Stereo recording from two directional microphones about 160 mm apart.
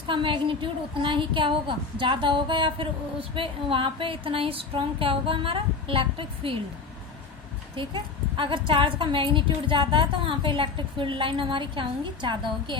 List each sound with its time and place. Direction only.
0.1 s speech: 30° right (ahead or behind)
7.8 s speech: 30° right (ahead or behind)